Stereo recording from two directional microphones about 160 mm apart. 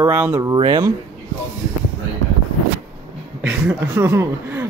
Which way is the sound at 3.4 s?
15° right (ahead or behind).